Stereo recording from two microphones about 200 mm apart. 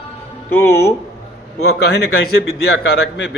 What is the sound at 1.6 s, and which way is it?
Speech, 55° left (ahead or behind).